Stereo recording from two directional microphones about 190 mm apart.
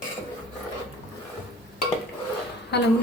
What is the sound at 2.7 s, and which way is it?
Speech, 60° left (ahead or behind).